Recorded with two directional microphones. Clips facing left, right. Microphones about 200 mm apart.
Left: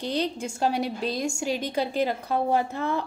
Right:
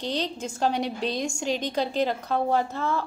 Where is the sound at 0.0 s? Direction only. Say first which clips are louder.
Left 2 dB; 10° left (ahead or behind).